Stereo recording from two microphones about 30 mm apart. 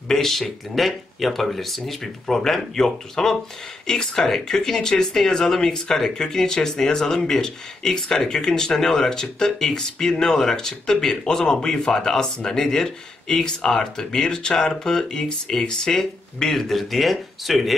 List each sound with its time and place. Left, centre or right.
0.1 s speech: centre; by 16.0 s left
16.4 s speech: centre